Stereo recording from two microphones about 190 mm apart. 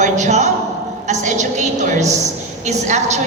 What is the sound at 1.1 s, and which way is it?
A woman's voice, 40° right (ahead or behind).